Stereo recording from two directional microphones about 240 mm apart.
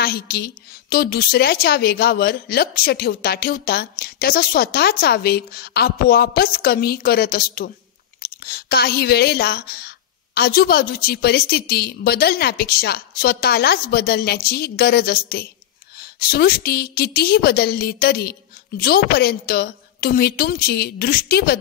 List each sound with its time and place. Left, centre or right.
0.0 s speech: left